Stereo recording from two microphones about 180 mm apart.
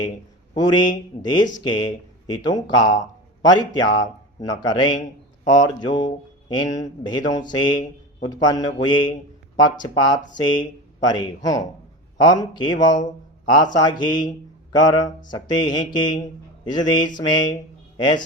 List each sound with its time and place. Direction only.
0.5 s mantra: 25° left (ahead or behind)
3.4 s a man's voice: 20° left (ahead or behind)
3.8 s mantra: 20° left (ahead or behind)
13.0 s a sound: 45° left (ahead or behind)
13.5 s mantra: 20° left (ahead or behind)
17.9 s a man's voice: 25° left (ahead or behind)